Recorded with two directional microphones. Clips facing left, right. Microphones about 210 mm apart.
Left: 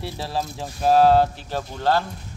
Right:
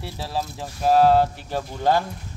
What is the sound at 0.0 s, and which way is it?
Speech, 10° right (ahead or behind).